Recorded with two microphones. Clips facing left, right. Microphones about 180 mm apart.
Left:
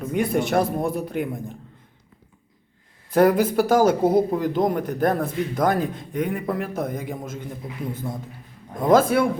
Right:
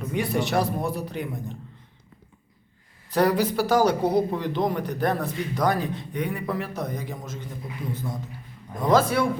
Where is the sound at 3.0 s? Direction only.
50° left (ahead or behind).